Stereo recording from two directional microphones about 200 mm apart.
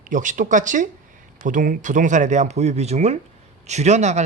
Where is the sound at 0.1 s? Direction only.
40° right (ahead or behind).